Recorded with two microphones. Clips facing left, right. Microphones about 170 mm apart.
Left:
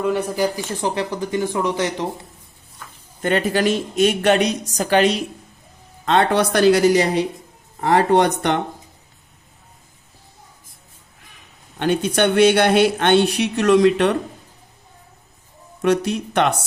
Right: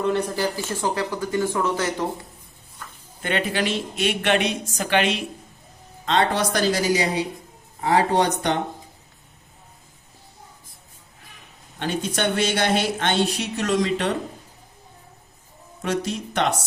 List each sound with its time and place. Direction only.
0.0 s speech: 10° left (ahead or behind)
3.2 s speech: 45° left (ahead or behind)
6.1 s speech: 60° left (ahead or behind)
11.8 s speech: 60° left (ahead or behind)
15.8 s speech: 65° left (ahead or behind)